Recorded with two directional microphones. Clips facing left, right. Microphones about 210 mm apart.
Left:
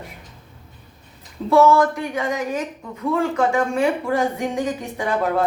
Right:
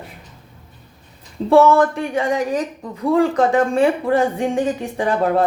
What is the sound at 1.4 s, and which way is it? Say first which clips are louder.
A woman's voice: right 2 dB; 25° right (ahead or behind).